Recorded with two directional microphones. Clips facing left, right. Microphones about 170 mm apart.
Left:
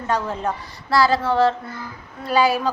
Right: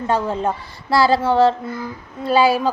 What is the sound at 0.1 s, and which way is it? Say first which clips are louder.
Speech: right 3 dB; 30° right (ahead or behind).